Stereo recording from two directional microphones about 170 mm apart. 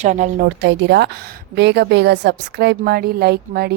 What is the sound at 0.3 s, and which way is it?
A woman's voice, 90° right.